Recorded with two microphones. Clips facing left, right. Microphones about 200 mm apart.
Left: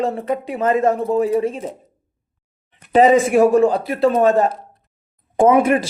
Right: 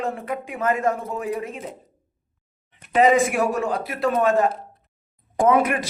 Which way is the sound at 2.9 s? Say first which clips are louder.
Left 5 dB; 30° left (ahead or behind).